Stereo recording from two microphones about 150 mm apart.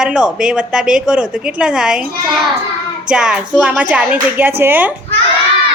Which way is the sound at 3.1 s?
5° right (ahead or behind).